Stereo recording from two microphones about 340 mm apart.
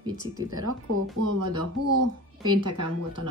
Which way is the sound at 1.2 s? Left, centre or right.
Right.